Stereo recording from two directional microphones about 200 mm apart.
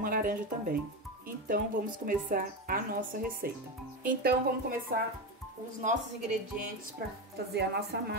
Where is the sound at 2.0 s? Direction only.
45° right (ahead or behind).